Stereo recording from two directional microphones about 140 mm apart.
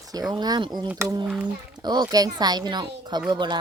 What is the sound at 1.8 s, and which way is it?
Speech, 30° right (ahead or behind).